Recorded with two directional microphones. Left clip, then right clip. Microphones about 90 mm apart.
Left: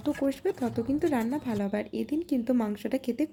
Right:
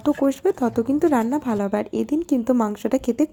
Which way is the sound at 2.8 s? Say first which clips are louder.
Right 9 dB; 45° right (ahead or behind).